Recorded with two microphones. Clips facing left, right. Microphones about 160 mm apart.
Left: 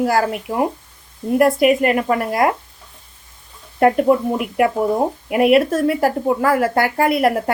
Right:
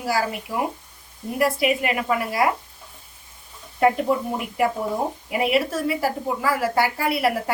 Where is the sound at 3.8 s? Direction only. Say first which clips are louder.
Left 6 dB; 55° left (ahead or behind).